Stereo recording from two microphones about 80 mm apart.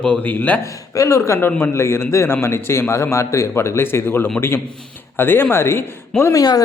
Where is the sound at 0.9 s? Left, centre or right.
Left.